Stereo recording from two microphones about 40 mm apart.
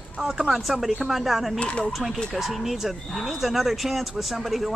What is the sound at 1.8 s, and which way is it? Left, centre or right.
Speech, centre.